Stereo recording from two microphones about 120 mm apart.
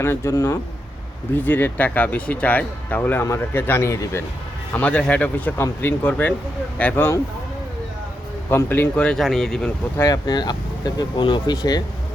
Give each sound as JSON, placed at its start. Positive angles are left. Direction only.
{"t": 0.0, "sound": "speech", "side_deg": 20}
{"t": 4.7, "sound": "speech", "side_deg": 10}
{"t": 8.4, "sound": "speech", "side_deg": 20}
{"t": 10.0, "sound": "speech", "side_deg": 35}